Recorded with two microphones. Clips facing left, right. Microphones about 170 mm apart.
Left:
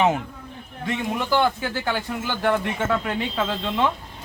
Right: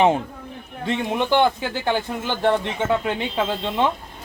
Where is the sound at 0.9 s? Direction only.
25° right (ahead or behind).